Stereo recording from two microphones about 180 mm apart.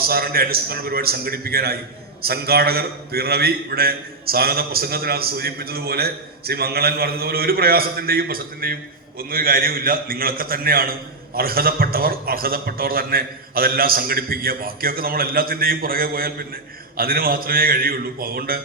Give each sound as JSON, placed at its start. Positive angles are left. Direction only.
{"t": 0.0, "sound": "a man's voice", "side_deg": -55}